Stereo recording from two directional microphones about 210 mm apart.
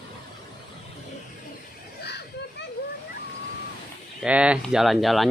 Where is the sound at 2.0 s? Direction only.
50° left (ahead or behind).